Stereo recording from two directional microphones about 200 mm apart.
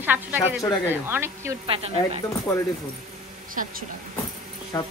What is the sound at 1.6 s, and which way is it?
Speech, 30° right (ahead or behind).